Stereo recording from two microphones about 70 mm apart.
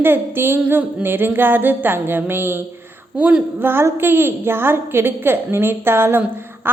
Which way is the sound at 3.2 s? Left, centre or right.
Right.